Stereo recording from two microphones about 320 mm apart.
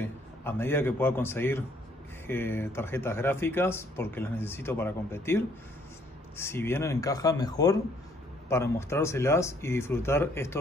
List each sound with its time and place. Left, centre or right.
0.0 s a man's voice: centre